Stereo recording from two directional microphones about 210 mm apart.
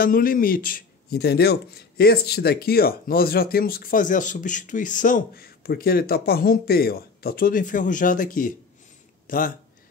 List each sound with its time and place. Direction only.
0.0 s speech: 45° left (ahead or behind)